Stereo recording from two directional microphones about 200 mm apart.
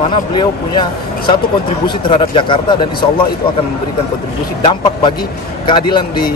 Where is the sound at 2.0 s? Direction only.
25° left (ahead or behind).